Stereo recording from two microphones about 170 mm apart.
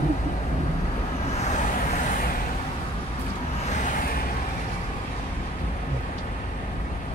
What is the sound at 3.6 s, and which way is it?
Vehicle, 45° left (ahead or behind).